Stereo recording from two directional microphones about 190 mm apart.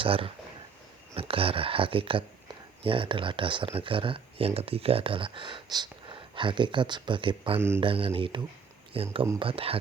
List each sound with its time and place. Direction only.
0.0 s speech: 30° right (ahead or behind)